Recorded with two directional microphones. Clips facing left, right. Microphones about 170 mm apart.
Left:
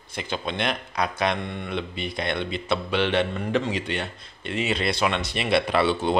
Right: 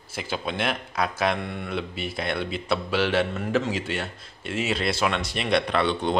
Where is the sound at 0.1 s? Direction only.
5° right (ahead or behind).